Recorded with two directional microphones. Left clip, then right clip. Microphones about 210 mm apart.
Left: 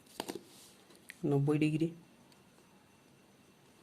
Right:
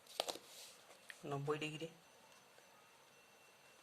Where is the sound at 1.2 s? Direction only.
25° left (ahead or behind).